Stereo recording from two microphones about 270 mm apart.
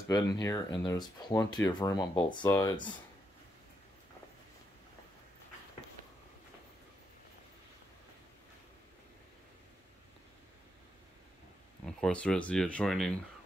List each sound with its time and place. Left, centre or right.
0.1 s speech: centre
12.0 s speech: centre